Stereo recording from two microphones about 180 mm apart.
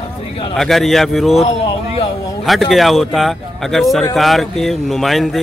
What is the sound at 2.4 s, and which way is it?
Speech, centre (ahead or behind).